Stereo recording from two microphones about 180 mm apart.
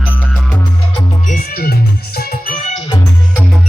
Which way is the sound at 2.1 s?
50° left (ahead or behind).